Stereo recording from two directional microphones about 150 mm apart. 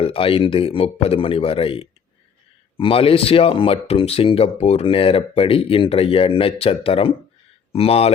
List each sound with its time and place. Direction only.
0.0 s speech: 35° left (ahead or behind)